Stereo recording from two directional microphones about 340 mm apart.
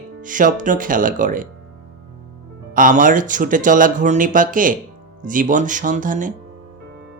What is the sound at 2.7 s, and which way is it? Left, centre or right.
Speech, right.